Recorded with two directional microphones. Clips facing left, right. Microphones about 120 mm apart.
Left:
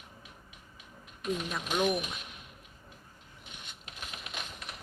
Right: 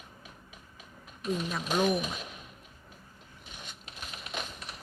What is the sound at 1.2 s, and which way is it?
Speech, 35° right (ahead or behind).